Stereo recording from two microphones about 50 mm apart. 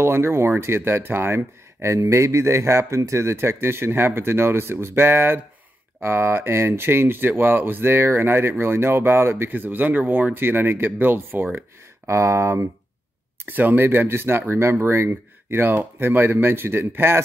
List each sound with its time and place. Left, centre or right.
0.0 s speech: right
9.5 s speech: right
12.1 s speech: right
13.5 s speech: right